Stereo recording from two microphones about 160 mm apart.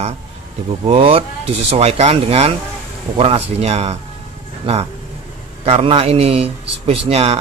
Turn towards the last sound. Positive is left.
turn(degrees=-40)  # may be behind; listen again after turning